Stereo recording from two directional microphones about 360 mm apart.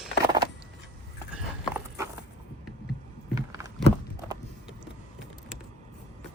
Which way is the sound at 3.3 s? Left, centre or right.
Centre.